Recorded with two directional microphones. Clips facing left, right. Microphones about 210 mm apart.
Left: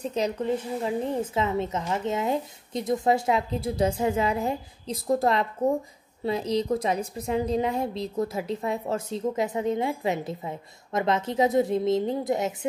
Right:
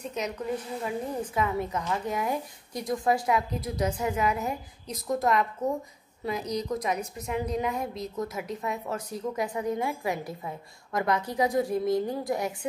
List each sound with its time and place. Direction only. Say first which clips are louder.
0.0 s a woman's voice: left 5 dB; 30° left (ahead or behind)